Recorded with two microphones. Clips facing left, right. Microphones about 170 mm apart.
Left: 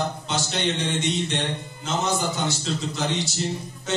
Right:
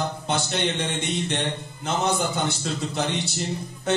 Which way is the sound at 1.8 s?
60° right (ahead or behind).